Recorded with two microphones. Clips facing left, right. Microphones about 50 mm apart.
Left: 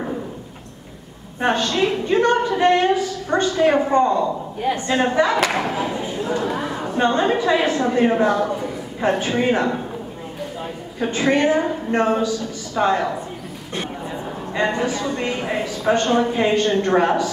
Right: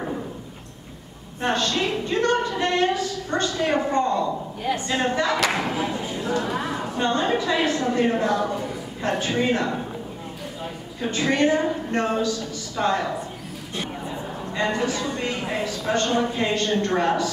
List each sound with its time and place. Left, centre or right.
1.4 s a woman's voice: left
6.5 s speech: centre
7.0 s a woman's voice: left
11.0 s a woman's voice: left
14.5 s a woman's voice: left
15.8 s a woman's voice: left